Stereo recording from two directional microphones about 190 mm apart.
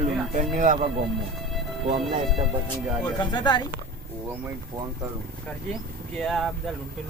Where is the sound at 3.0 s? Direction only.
25° left (ahead or behind).